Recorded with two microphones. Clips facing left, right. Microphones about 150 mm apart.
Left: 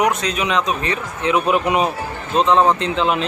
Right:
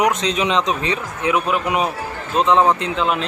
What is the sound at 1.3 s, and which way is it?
Speech, centre (ahead or behind).